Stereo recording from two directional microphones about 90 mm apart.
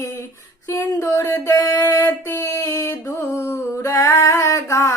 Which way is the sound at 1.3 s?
40° left (ahead or behind).